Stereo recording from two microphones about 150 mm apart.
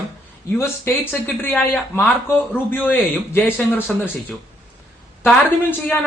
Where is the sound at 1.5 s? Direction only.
10° left (ahead or behind).